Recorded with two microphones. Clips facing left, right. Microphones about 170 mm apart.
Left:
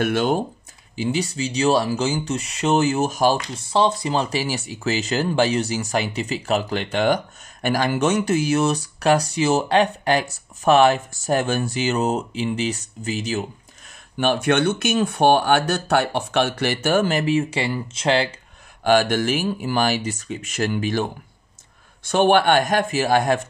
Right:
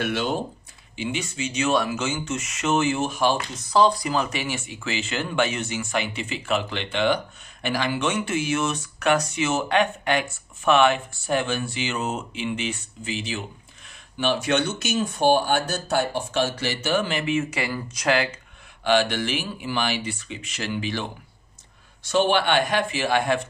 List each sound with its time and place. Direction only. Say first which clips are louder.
0.0 s speech: left 5 dB; 50° left (ahead or behind)
0.9 s speech: left 5 dB; 35° left (ahead or behind)
14.1 s speech: left 4 dB; 50° left (ahead or behind); by 18.3 s 30° left (ahead or behind)
18.9 s speech: left 4 dB; 45° left (ahead or behind)